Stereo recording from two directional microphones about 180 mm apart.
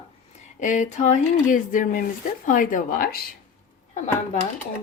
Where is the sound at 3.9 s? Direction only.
40° left (ahead or behind).